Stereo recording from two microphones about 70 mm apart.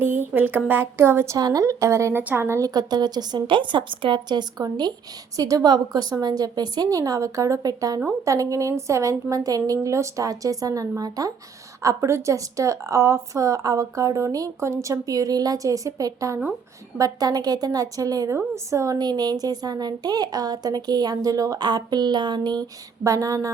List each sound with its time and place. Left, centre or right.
0.0 s a woman's voice: right
1.4 s a woman's voice: right
2.1 s a woman's voice: right
2.6 s a woman's voice: right
5.4 s a woman's voice: right
11.8 s a woman's voice: right
17.0 s a woman's voice: right
18.3 s a woman's voice: right
18.9 s a woman's voice: right
21.6 s speech: right
23.0 s a woman's voice: right